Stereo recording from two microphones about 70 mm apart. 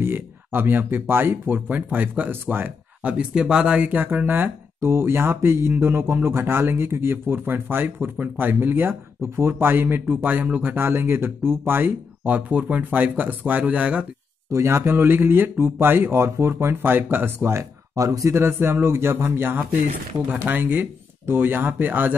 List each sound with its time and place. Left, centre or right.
0.0 s speech: right
14.5 s speech: right
17.9 s a man's voice: right
18.3 s speech: right